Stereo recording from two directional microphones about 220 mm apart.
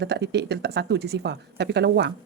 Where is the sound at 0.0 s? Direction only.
50° right (ahead or behind).